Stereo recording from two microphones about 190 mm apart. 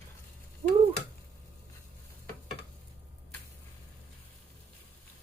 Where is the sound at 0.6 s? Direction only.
30° right (ahead or behind).